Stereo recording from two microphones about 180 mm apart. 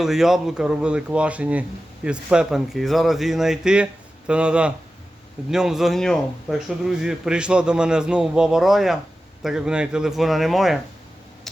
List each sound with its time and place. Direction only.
0.0 s a man's voice: centre (ahead or behind)